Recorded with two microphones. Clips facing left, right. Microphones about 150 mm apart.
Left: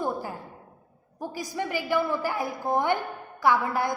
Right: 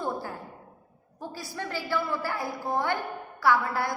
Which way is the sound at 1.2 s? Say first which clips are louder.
Left 5 dB; 15° left (ahead or behind).